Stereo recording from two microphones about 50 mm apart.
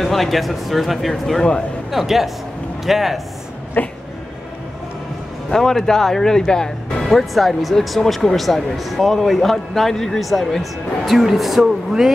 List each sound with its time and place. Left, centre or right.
0.0 s a man's voice: centre
3.8 s a sound: left
5.5 s speech: centre
7.1 s a man's voice: centre